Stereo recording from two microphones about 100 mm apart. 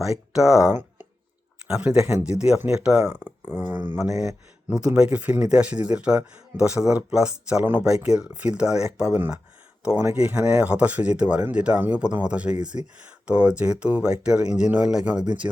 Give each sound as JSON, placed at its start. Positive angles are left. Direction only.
{"t": 0.0, "sound": "speech", "side_deg": -5}
{"t": 0.7, "sound": "a sound", "side_deg": -20}
{"t": 1.6, "sound": "speech", "side_deg": -10}
{"t": 7.6, "sound": "speech", "side_deg": -20}
{"t": 7.9, "sound": "speech", "side_deg": -10}